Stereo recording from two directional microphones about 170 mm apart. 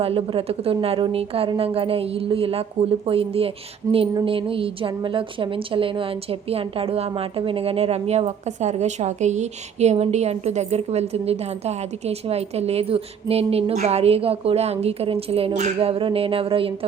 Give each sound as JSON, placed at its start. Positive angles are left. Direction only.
{"t": 0.0, "sound": "a woman's voice", "side_deg": -35}